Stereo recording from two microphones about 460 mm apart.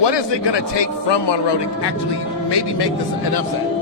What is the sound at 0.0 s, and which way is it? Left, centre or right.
A man's voice, left.